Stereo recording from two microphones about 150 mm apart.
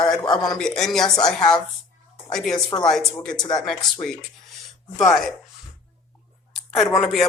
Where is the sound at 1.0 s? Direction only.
25° left (ahead or behind).